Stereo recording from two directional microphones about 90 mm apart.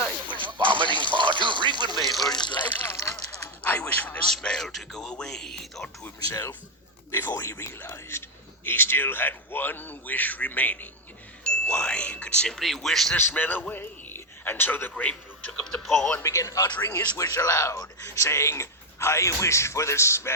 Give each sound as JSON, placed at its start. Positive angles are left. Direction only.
{"t": 0.3, "sound": "a sound", "side_deg": -65}
{"t": 2.0, "sound": "a sound", "side_deg": 0}
{"t": 2.3, "sound": "water", "side_deg": 55}
{"t": 2.8, "sound": "a sound", "side_deg": 30}
{"t": 3.6, "sound": "a sound", "side_deg": 20}
{"t": 4.3, "sound": "speech", "side_deg": 5}
{"t": 7.1, "sound": "a man's voice", "side_deg": 25}
{"t": 13.1, "sound": "a man's voice", "side_deg": 25}
{"t": 15.5, "sound": "speech", "side_deg": 5}
{"t": 16.2, "sound": "speech", "side_deg": 40}
{"t": 16.7, "sound": "a man's voice", "side_deg": 25}
{"t": 17.2, "sound": "speech", "side_deg": 40}